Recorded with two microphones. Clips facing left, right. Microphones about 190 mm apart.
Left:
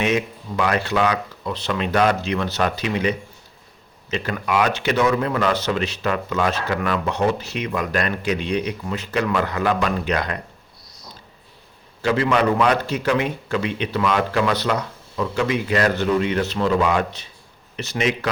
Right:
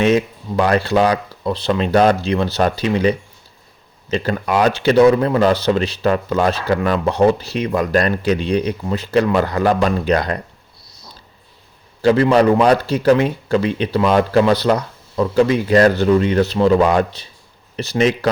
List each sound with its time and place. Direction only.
0.0 s speech: 35° right (ahead or behind)
12.0 s speech: 35° right (ahead or behind)